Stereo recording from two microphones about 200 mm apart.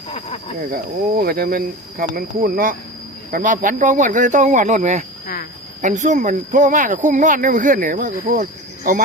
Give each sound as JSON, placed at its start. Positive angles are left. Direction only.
{"t": 0.1, "sound": "speech", "side_deg": 30}
{"t": 0.7, "sound": "speech", "side_deg": -45}
{"t": 5.2, "sound": "cricket", "side_deg": 45}
{"t": 5.8, "sound": "speech", "side_deg": -40}